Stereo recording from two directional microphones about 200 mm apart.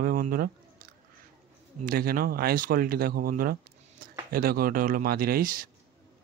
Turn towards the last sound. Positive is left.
turn(degrees=-45)  # may be behind; listen again after turning